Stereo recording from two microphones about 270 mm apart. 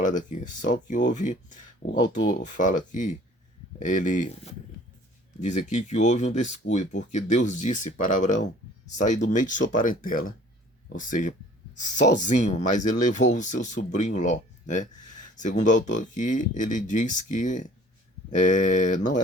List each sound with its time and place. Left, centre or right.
0.0 s speech: left
1.9 s speech: left
2.3 s speech: left
5.4 s speech: left
15.4 s speech: left